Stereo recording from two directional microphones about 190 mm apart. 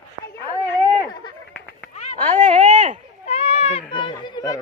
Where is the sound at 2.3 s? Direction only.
40° right (ahead or behind).